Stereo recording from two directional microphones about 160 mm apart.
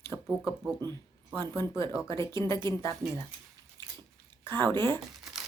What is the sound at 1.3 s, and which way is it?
Speech, 15° left (ahead or behind).